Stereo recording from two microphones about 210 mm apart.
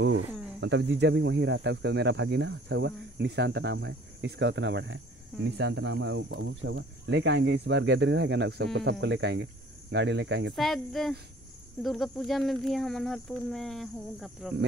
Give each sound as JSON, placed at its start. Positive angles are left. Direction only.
{"t": 0.0, "sound": "speech", "side_deg": -90}
{"t": 0.6, "sound": "speech", "side_deg": -55}
{"t": 10.5, "sound": "speech", "side_deg": 0}